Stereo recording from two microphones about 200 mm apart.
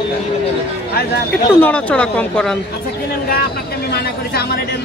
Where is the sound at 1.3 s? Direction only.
10° left (ahead or behind).